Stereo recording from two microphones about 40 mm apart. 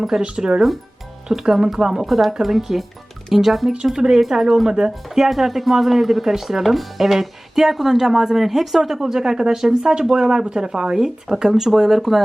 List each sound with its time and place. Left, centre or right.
0.2 s a woman's voice: right
1.3 s speech: centre
5.0 s a woman's voice: centre